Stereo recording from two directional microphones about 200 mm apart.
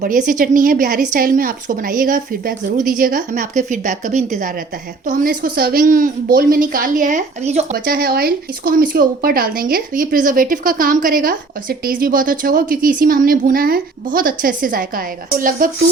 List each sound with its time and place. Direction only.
0.0 s speech: 40° right (ahead or behind)
7.9 s speech: 50° right (ahead or behind)